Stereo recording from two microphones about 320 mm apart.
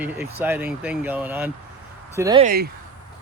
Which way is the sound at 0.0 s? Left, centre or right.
Centre.